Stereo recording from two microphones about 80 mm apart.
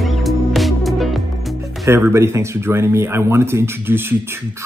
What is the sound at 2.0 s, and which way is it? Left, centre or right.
Speech, right.